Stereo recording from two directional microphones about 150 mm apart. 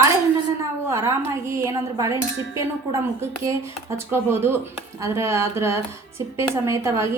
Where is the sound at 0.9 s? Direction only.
15° right (ahead or behind).